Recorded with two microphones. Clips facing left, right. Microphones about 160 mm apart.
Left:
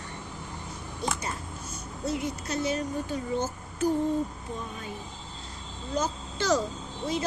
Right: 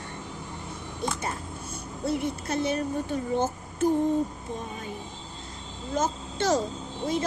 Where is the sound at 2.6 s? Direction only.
55° right (ahead or behind).